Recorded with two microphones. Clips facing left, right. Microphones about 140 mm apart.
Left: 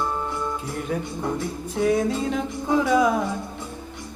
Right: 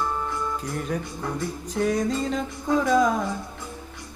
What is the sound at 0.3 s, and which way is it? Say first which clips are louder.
Music: left 1 dB; 5° left (ahead or behind).